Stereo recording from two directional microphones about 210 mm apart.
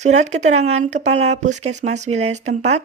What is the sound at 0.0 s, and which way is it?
Speech, 35° right (ahead or behind).